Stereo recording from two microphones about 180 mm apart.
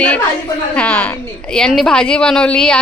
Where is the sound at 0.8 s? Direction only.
5° left (ahead or behind).